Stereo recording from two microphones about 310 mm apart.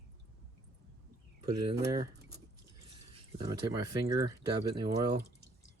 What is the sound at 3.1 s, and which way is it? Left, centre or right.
Speech, centre.